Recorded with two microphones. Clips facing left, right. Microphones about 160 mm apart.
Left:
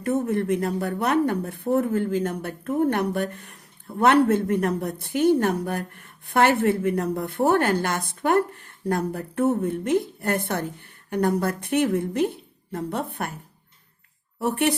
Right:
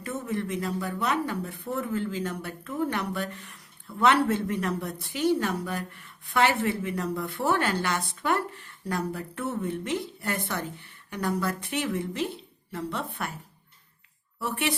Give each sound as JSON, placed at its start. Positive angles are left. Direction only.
{"t": 0.0, "sound": "speech", "side_deg": 55}